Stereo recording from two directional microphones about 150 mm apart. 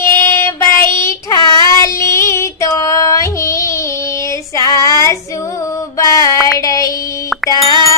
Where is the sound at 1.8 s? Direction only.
20° left (ahead or behind).